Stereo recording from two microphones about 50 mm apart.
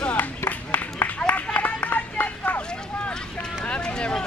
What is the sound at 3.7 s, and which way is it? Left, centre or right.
Speech, left.